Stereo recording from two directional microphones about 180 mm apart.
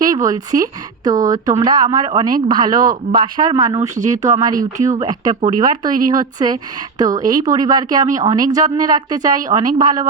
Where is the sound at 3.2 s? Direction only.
25° right (ahead or behind).